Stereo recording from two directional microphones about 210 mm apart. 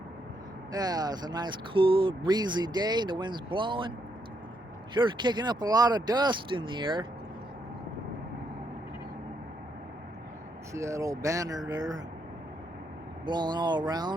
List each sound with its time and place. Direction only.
0.7 s speech: 20° right (ahead or behind)
4.9 s speech: 20° right (ahead or behind)
10.8 s speech: 15° right (ahead or behind)
13.2 s speech: 20° right (ahead or behind)